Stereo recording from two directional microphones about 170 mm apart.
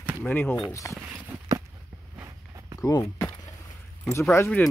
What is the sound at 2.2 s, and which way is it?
Walk, 20° right (ahead or behind).